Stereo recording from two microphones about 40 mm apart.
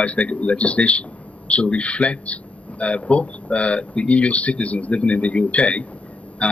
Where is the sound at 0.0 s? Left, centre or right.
Left.